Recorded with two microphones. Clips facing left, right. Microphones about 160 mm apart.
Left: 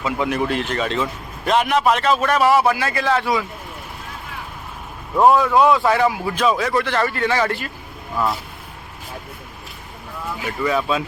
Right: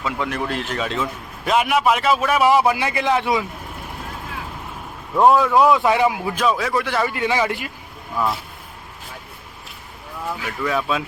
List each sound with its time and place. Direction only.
0.0 s a man's voice: 5° left (ahead or behind); by 3.4 s 20° right (ahead or behind)
5.1 s speech: 5° left (ahead or behind)
5.7 s a man's voice: 15° right (ahead or behind)
6.4 s a man's voice: centre (ahead or behind)
8.1 s speech: centre (ahead or behind)
10.6 s speech: centre (ahead or behind)